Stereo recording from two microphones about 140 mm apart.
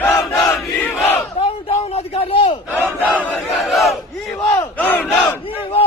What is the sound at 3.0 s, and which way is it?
Crowd, 15° left (ahead or behind).